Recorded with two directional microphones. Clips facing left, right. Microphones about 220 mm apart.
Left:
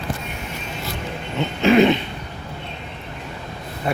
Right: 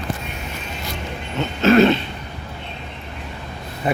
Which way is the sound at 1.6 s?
15° left (ahead or behind).